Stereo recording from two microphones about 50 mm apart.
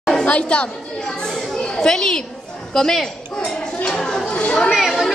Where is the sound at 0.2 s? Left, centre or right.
Left.